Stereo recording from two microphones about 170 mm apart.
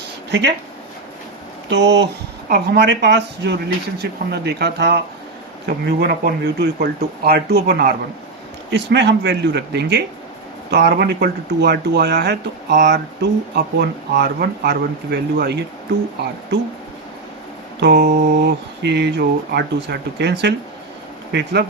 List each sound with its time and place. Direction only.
0.3 s speech: 90° right
1.7 s speech: 90° right; by 7.9 s 70° right (ahead or behind)
8.7 s speech: 90° right; by 15.6 s 75° right (ahead or behind)
17.9 s mantra: 50° right (ahead or behind)
18.3 s speech: 85° right